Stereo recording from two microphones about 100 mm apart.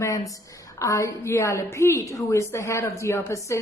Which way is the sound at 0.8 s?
30° left (ahead or behind).